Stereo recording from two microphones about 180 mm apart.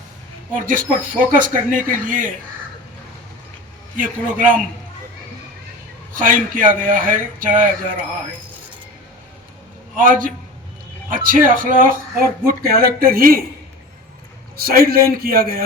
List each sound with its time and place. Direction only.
0.5 s speech: 50° right (ahead or behind)
3.9 s speech: 50° right (ahead or behind)
6.1 s speech: 50° right (ahead or behind)
10.0 s a man's voice: 50° right (ahead or behind)
14.5 s a man's voice: 55° right (ahead or behind)